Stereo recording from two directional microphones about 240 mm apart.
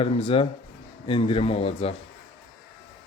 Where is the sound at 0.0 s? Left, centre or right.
Left.